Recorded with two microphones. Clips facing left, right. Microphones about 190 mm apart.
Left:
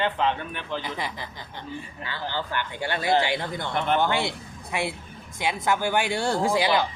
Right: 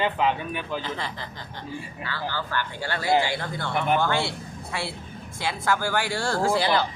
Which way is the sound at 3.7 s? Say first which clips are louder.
Right 1 dB; 10° right (ahead or behind).